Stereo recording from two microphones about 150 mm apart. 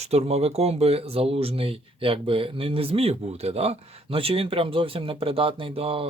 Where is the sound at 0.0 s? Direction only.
45° right (ahead or behind).